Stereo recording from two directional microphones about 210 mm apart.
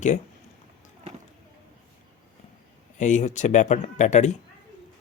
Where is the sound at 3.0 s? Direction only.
35° left (ahead or behind).